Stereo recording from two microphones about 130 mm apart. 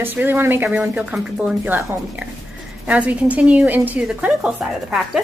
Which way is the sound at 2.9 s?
10° right (ahead or behind).